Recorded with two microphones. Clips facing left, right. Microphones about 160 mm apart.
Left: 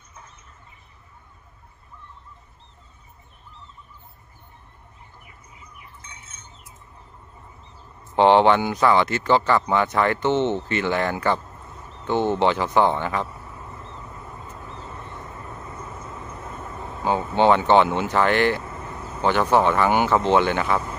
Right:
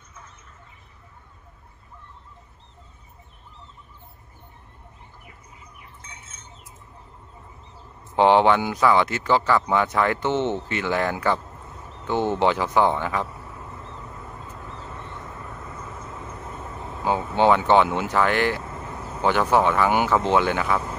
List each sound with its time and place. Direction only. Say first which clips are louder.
8.2 s speech: left 1 dB; 5° right (ahead or behind)
15.3 s vehicle: left 1 dB; 25° left (ahead or behind)
16.8 s speech: left 1 dB; centre (ahead or behind)